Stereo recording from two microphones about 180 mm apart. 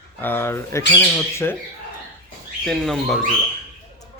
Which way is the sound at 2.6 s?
5° left (ahead or behind).